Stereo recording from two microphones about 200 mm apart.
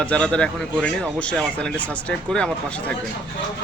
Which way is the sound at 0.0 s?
5° left (ahead or behind).